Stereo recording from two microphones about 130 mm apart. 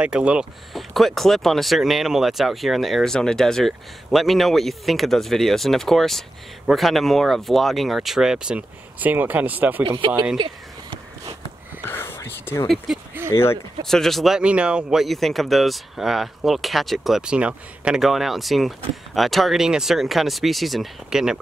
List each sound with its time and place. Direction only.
0.0 s speech: 10° right (ahead or behind)
9.8 s speech: 40° right (ahead or behind)
11.8 s whispering: 15° left (ahead or behind)
12.6 s speech: centre (ahead or behind)
13.3 s speech: 20° left (ahead or behind)
13.8 s speech: 5° left (ahead or behind)